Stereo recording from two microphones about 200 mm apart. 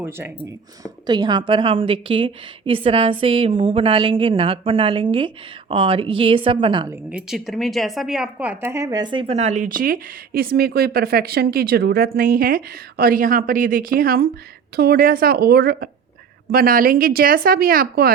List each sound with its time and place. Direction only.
0.0 s speech: 15° right (ahead or behind)
7.1 s a woman's voice: 5° right (ahead or behind); by 18.1 s 45° right (ahead or behind)